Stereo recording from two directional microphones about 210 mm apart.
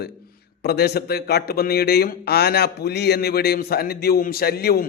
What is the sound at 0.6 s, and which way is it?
A man's voice, 50° left (ahead or behind).